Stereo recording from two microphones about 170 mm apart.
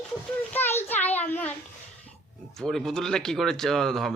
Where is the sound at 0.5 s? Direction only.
15° left (ahead or behind).